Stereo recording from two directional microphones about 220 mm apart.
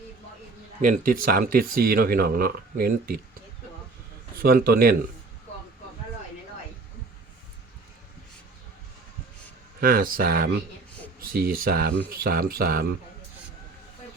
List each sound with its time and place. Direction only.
0.8 s speech: 40° right (ahead or behind)
4.4 s a man's voice: 45° right (ahead or behind)
9.8 s speech: 40° right (ahead or behind)